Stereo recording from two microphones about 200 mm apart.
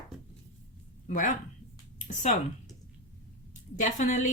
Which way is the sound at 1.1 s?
40° left (ahead or behind).